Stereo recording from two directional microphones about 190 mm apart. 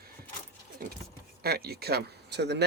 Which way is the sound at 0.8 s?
50° right (ahead or behind).